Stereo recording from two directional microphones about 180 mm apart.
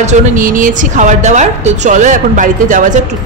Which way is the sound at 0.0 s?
50° right (ahead or behind).